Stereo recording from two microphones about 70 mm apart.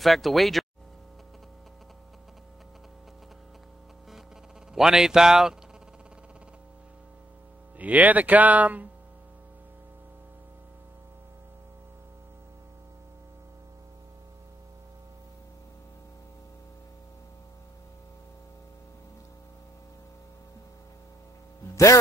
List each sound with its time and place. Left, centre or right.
0.0 s speech: centre
4.7 s speech: centre
7.8 s speech: right